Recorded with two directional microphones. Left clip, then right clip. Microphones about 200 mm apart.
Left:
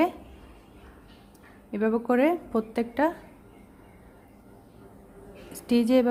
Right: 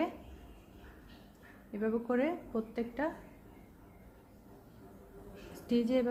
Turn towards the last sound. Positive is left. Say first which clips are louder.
# left 9 dB
turn(degrees=25)  # may be behind; listen again after turning